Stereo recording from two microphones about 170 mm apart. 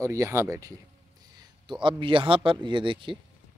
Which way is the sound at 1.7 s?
30° right (ahead or behind).